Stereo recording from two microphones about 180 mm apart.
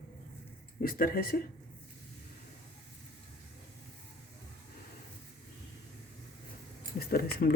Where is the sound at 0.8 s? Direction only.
55° left (ahead or behind).